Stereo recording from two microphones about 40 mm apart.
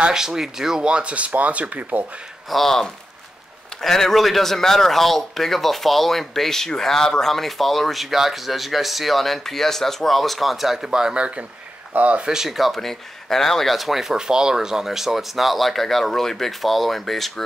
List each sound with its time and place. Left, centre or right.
0.1 s speech: centre
0.8 s speech: right
2.5 s speech: centre
10.9 s speech: centre
11.9 s speech: right
12.3 s speech: centre
12.5 s speech: centre